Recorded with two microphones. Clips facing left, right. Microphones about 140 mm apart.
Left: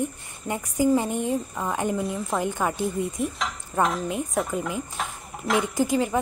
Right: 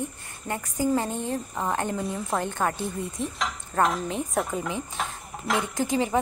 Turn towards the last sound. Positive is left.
turn(degrees=0)  # may be behind; listen again after turning